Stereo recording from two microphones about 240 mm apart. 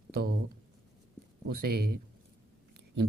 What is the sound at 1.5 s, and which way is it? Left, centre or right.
Speech, right.